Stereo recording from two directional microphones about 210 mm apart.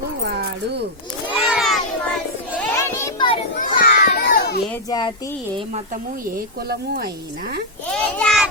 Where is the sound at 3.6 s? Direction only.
40° left (ahead or behind).